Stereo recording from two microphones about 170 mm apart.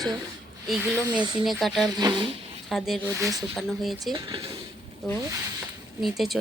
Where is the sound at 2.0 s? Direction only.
25° right (ahead or behind).